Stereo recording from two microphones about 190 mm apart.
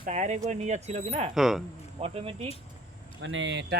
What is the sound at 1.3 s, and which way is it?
Speech, centre (ahead or behind).